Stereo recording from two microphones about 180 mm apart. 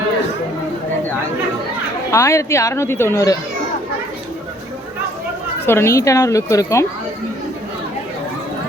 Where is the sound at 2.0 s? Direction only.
15° left (ahead or behind).